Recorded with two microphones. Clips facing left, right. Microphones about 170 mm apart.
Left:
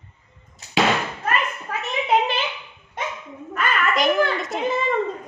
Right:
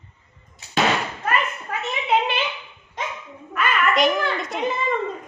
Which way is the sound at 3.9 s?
Centre (ahead or behind).